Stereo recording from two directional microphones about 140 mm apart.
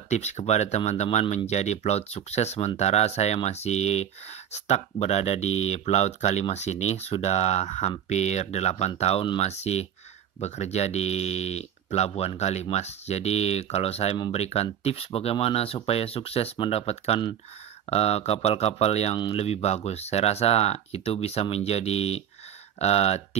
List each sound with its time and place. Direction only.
0.1 s speech: 55° left (ahead or behind)